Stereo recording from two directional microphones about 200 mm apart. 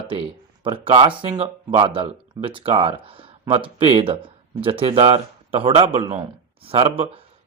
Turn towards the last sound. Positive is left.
turn(degrees=-30)  # may be behind; listen again after turning